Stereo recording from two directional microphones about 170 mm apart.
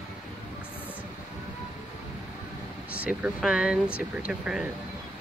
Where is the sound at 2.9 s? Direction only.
5° right (ahead or behind).